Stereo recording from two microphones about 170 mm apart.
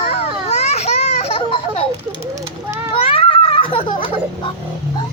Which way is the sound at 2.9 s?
35° left (ahead or behind).